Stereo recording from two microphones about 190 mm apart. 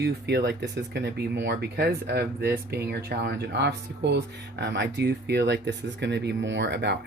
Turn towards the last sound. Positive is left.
turn(degrees=-65)  # may be behind; listen again after turning